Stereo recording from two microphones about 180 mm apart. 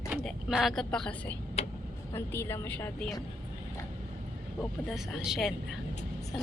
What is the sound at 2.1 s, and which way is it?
A woman's voice, 15° left (ahead or behind).